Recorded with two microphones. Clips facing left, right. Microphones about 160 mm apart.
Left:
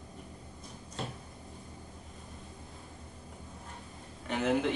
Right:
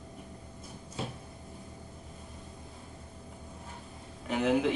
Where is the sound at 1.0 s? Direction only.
5° right (ahead or behind).